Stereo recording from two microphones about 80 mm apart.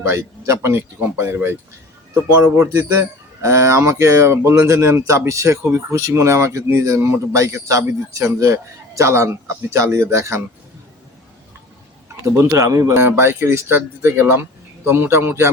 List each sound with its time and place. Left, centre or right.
0.1 s speech: right
12.0 s speech: right
12.9 s a man's voice: right